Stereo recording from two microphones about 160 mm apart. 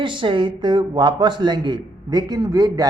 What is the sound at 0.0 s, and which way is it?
Speech, 30° right (ahead or behind).